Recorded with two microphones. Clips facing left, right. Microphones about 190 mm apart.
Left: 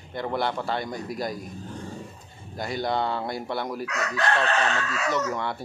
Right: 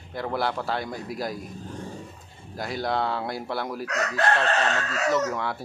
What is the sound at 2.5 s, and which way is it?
Speech, centre (ahead or behind).